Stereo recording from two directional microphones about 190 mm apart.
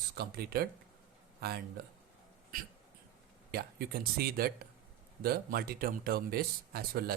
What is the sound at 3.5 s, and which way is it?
Speech, 55° right (ahead or behind).